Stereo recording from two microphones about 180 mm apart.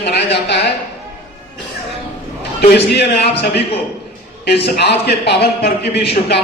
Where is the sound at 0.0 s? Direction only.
70° left (ahead or behind).